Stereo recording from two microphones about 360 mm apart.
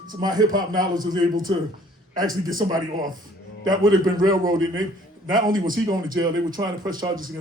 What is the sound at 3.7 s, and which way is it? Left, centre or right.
A man's voice, centre.